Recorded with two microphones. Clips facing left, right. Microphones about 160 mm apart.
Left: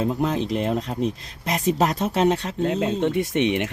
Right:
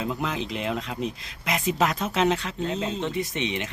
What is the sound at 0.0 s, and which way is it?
Speech, 40° left (ahead or behind).